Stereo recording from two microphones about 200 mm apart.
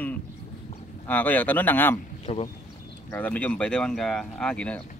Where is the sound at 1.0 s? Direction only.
10° left (ahead or behind).